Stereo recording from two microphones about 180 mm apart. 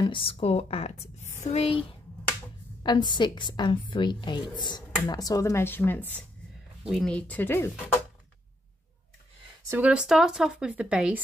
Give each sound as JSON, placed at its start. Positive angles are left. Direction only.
{"t": 0.0, "sound": "a woman's voice", "side_deg": 30}
{"t": 9.7, "sound": "speech", "side_deg": -10}